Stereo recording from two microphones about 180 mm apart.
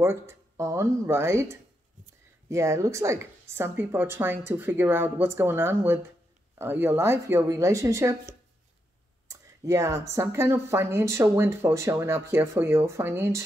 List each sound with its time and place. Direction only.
0.0 s speech: 15° right (ahead or behind)